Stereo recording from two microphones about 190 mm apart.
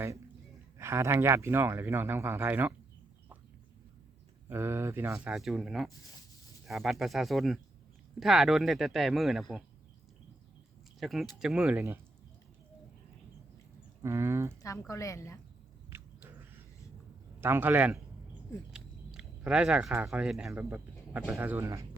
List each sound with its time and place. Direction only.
0.8 s speech: 15° right (ahead or behind)
4.4 s speech: 15° right (ahead or behind)
11.0 s speech: centre (ahead or behind)
14.0 s speech: 15° right (ahead or behind)
14.6 s a woman's voice: 15° left (ahead or behind)
15.9 s a sound: 10° right (ahead or behind)
17.4 s speech: 10° right (ahead or behind)